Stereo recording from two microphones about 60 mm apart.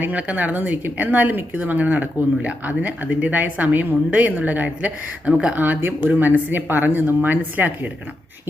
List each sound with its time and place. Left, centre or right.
0.0 s a woman's voice: right
5.5 s speech: right